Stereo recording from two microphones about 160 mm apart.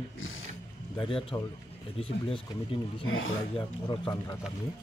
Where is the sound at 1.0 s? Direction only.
35° left (ahead or behind).